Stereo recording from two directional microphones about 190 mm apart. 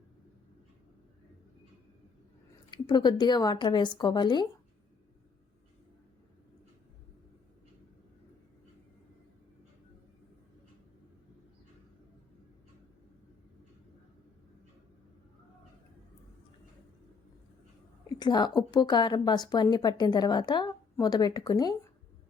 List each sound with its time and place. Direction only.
2.6 s a woman's voice: 25° left (ahead or behind)
18.2 s a woman's voice: 25° left (ahead or behind)